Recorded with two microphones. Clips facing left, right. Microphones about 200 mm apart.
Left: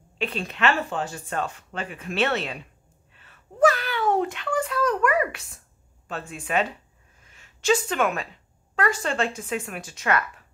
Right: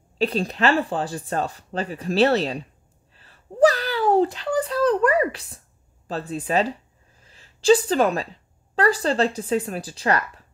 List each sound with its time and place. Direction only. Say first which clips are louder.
0.2 s a woman's voice: right 4 dB; 35° right (ahead or behind)